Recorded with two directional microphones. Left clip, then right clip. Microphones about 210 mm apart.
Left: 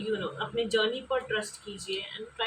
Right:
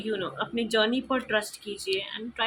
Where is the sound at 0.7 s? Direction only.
45° right (ahead or behind).